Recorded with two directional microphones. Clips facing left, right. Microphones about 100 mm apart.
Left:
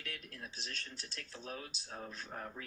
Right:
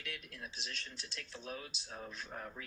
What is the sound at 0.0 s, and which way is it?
Speech, 40° left (ahead or behind).